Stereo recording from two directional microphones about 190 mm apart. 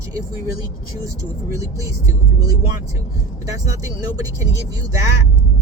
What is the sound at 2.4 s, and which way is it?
Speech, 15° right (ahead or behind).